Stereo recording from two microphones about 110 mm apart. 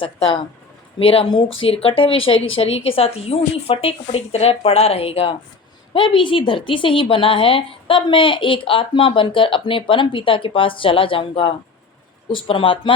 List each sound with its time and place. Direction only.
0.9 s speech: 60° left (ahead or behind)
5.9 s a woman's voice: 50° left (ahead or behind)